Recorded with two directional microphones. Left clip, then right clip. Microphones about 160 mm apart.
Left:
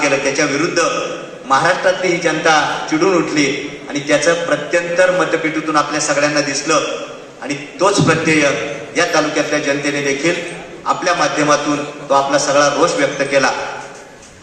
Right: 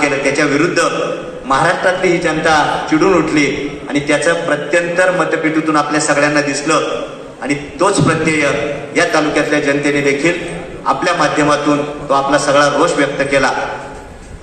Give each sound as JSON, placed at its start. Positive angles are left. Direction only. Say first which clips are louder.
{"t": 0.0, "sound": "a man's voice", "louder": "right 1 dB", "side_deg": -20}